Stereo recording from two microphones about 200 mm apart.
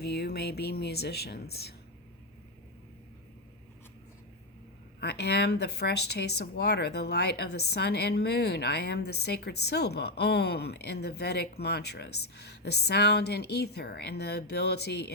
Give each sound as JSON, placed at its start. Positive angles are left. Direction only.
{"t": 0.0, "sound": "speech", "side_deg": 55}
{"t": 4.9, "sound": "speech", "side_deg": 55}